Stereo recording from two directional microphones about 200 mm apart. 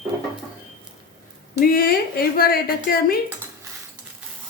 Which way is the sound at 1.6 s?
45° left (ahead or behind).